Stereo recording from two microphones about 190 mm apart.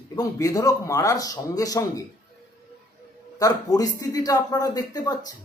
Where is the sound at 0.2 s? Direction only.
20° left (ahead or behind).